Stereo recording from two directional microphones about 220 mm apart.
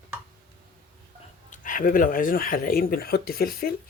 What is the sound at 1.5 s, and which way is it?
Speech, 35° left (ahead or behind).